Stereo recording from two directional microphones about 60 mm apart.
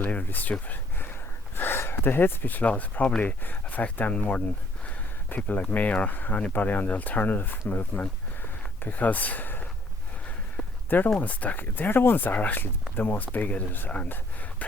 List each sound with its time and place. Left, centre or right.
0.0 s speech: left
1.5 s speech: left
7.7 s a sound: left
10.8 s speech: left